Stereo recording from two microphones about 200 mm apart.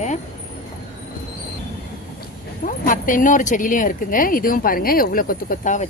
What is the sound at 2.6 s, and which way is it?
Speech, 40° left (ahead or behind).